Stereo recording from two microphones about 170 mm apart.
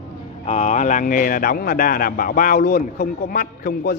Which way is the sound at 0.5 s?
40° left (ahead or behind).